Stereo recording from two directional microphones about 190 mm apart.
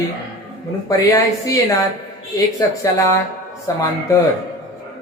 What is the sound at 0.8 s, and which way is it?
Speech, 15° left (ahead or behind).